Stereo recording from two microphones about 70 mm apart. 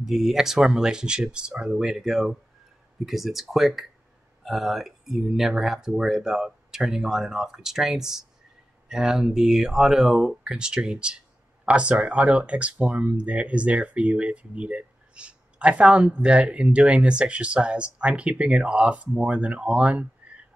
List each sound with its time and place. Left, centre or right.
0.0 s speech: centre